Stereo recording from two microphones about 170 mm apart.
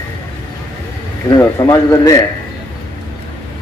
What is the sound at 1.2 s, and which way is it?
Speech, 20° left (ahead or behind).